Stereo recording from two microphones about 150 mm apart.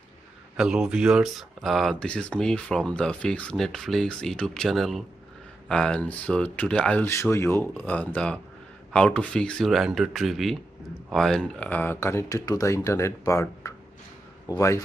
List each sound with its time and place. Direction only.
0.6 s speech: 5° right (ahead or behind); by 14.6 s 25° left (ahead or behind)